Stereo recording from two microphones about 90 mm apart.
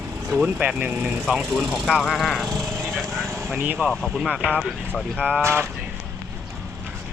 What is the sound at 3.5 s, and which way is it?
Speech, 25° right (ahead or behind).